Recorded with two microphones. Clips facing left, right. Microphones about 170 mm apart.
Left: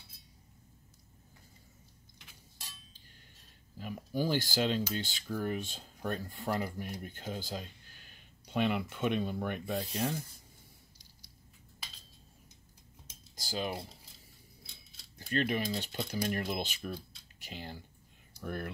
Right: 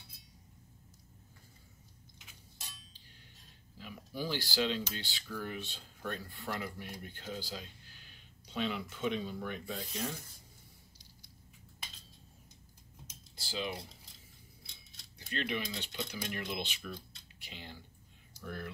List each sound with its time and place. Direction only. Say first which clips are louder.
2.1 s a sound: left 1 dB; centre (ahead or behind)
3.7 s speech: left 7 dB; 45° left (ahead or behind)
13.4 s speech: left 3 dB; 45° left (ahead or behind)
15.1 s speech: left 5 dB; 45° left (ahead or behind)
18.4 s speech: left 4 dB; 55° left (ahead or behind)